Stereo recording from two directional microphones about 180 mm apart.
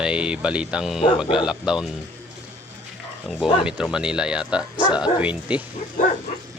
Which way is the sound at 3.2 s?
Centre (ahead or behind).